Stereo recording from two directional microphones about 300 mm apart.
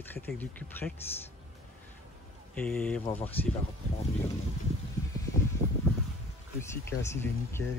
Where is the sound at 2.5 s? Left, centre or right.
Centre.